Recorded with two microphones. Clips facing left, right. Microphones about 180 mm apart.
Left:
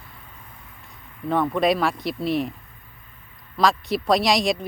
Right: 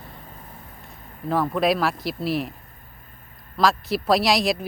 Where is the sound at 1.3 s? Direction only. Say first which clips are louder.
Left 1 dB; centre (ahead or behind).